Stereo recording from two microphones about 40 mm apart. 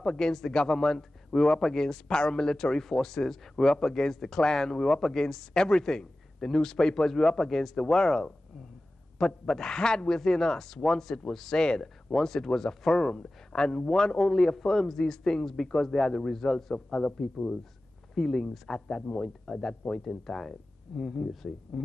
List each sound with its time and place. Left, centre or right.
0.0 s speech: centre
11.8 s speech: centre
16.7 s a man's voice: left
18.1 s speech: centre